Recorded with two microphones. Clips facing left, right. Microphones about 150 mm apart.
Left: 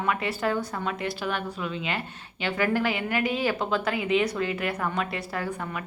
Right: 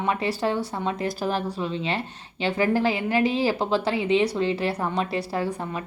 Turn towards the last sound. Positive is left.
turn(degrees=-30)  # may be behind; listen again after turning